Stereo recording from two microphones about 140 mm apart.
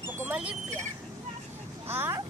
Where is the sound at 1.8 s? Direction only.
15° right (ahead or behind).